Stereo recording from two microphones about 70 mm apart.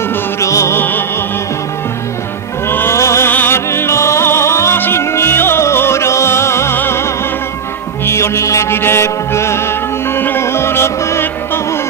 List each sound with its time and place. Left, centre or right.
0.4 s music: left
0.7 s music: left
2.7 s music: left
3.0 s music: left
3.3 s music: left